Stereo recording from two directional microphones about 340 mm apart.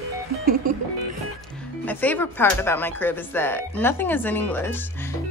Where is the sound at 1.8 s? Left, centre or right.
Centre.